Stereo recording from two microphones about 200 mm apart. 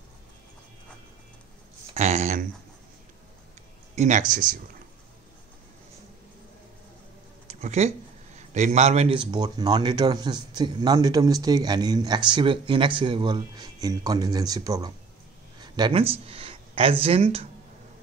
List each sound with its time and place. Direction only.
2.0 s speech: 35° right (ahead or behind)
3.9 s speech: 35° right (ahead or behind)
7.4 s a sound: 35° right (ahead or behind)
8.4 s a man's voice: 35° right (ahead or behind)